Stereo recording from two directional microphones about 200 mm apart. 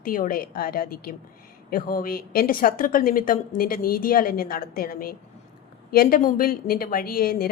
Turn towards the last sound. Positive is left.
turn(degrees=50)  # may be behind; listen again after turning